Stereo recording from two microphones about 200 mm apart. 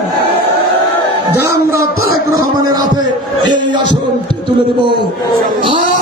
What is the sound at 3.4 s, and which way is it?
Speech, 20° right (ahead or behind).